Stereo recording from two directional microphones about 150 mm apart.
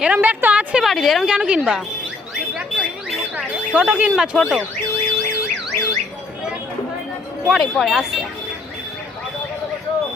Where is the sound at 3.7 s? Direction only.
10° right (ahead or behind).